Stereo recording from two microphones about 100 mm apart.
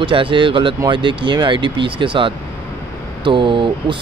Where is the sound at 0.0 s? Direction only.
55° right (ahead or behind).